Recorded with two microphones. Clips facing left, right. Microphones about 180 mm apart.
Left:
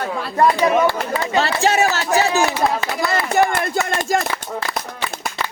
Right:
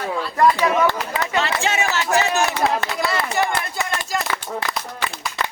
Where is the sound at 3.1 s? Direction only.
50° left (ahead or behind).